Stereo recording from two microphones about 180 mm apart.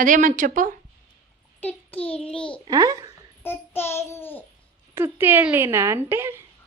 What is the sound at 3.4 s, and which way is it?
Child singing, 15° left (ahead or behind).